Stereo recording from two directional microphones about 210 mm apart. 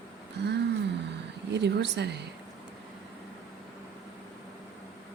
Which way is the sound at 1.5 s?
55° right (ahead or behind).